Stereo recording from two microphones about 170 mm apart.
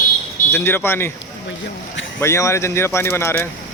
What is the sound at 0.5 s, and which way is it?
Speech, 15° left (ahead or behind).